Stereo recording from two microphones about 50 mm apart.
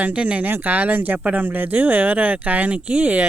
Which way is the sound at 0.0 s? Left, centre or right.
Right.